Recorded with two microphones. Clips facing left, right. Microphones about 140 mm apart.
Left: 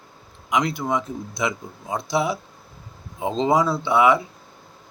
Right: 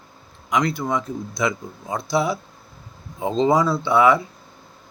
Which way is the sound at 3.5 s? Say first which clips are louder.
Left 1 dB; 15° left (ahead or behind).